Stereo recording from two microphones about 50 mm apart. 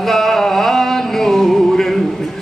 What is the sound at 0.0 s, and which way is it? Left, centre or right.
Music, centre.